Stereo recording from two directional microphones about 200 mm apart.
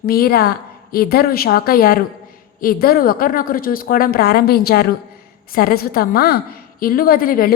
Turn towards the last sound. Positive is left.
turn(degrees=45)  # may be behind; listen again after turning